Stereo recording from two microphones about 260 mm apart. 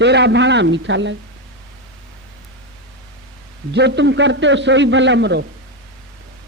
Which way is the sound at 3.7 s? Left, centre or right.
Right.